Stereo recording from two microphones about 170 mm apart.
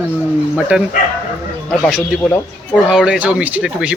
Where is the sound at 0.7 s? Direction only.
5° right (ahead or behind).